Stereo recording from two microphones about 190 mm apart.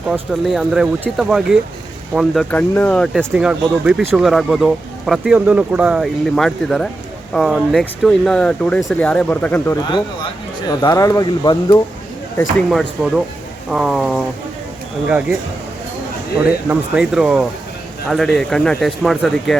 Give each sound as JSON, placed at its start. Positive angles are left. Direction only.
{"t": 0.1, "sound": "speech", "side_deg": 0}
{"t": 9.7, "sound": "speech", "side_deg": 20}
{"t": 12.7, "sound": "speech", "side_deg": 0}
{"t": 16.4, "sound": "speech", "side_deg": -5}